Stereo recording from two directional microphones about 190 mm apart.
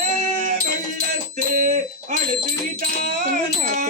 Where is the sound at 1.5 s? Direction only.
40° right (ahead or behind).